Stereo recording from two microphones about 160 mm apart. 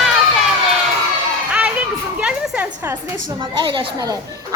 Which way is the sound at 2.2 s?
10° right (ahead or behind).